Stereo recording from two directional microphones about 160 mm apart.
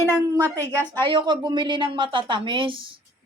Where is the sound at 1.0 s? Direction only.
30° right (ahead or behind).